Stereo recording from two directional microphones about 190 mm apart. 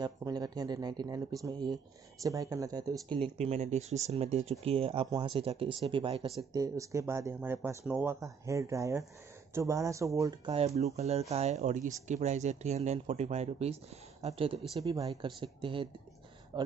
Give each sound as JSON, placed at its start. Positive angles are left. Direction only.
{"t": 0.0, "sound": "speech", "side_deg": -20}
{"t": 6.5, "sound": "speech", "side_deg": -15}
{"t": 11.0, "sound": "speech", "side_deg": -35}